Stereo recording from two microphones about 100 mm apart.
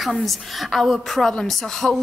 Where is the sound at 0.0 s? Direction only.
Centre (ahead or behind).